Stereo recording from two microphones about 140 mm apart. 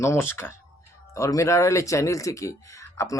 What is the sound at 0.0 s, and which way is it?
Speech, 15° left (ahead or behind).